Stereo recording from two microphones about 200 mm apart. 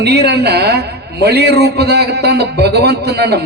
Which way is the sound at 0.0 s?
55° right (ahead or behind).